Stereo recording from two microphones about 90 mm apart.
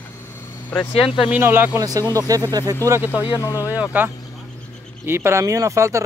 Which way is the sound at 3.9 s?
20° right (ahead or behind).